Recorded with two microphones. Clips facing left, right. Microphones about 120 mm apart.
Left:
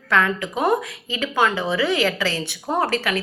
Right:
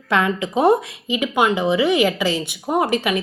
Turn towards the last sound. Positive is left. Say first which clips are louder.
# right 3 dB
turn(degrees=-20)  # may be behind; listen again after turning